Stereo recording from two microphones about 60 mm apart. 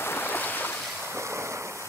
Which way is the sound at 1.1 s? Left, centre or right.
Right.